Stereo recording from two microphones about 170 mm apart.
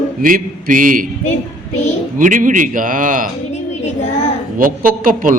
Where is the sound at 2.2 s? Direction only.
50° right (ahead or behind).